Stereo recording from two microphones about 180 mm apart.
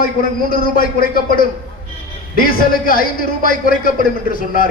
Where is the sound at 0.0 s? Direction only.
50° left (ahead or behind).